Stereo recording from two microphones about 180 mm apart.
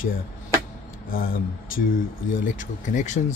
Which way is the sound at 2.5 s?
45° left (ahead or behind).